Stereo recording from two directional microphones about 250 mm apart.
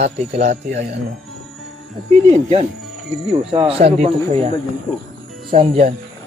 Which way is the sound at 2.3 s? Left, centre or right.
Right.